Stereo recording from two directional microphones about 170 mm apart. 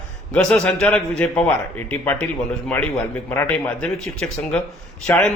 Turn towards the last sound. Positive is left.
turn(degrees=10)  # may be behind; listen again after turning